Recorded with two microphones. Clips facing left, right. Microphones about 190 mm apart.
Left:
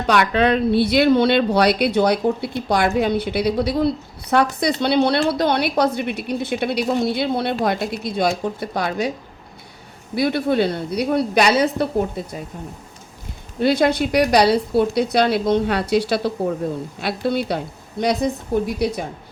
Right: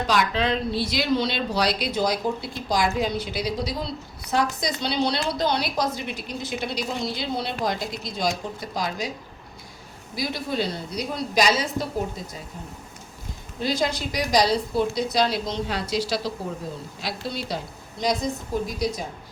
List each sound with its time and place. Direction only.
0.1 s speech: 60° left (ahead or behind)
10.2 s speech: 60° left (ahead or behind)
13.6 s speech: 65° left (ahead or behind)